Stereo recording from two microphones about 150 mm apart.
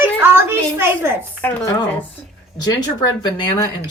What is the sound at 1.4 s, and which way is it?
Speech, 10° left (ahead or behind).